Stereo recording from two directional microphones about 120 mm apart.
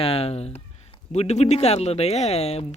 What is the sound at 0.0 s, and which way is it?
Speech, 55° left (ahead or behind).